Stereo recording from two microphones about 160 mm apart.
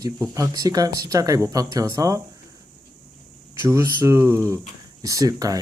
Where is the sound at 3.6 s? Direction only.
20° right (ahead or behind).